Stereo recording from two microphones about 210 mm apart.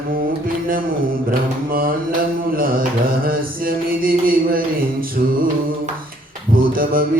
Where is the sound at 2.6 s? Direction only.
45° right (ahead or behind).